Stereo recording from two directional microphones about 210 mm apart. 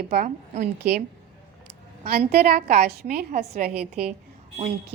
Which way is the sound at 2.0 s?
45° right (ahead or behind).